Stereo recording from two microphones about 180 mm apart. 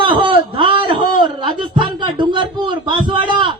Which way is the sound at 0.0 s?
30° right (ahead or behind).